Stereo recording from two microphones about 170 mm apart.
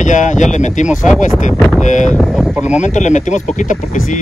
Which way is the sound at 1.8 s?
45° left (ahead or behind).